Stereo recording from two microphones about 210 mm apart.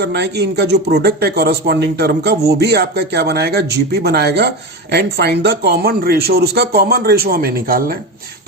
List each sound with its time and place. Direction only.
0.0 s speech: 50° right (ahead or behind)